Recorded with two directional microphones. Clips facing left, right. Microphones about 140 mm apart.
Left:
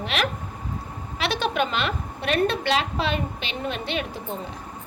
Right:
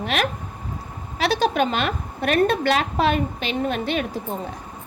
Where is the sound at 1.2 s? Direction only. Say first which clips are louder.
Right 4 dB; 40° right (ahead or behind).